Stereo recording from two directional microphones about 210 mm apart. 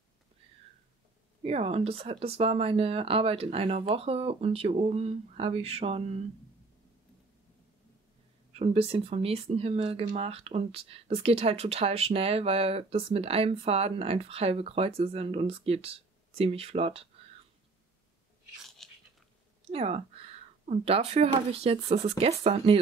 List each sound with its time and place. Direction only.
1.4 s speech: 25° right (ahead or behind)
8.5 s speech: 30° right (ahead or behind)
18.8 s biting: centre (ahead or behind)
19.7 s speech: 30° right (ahead or behind)